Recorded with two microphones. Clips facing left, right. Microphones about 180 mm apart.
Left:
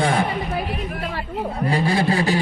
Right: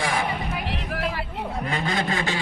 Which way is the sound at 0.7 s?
75° right (ahead or behind).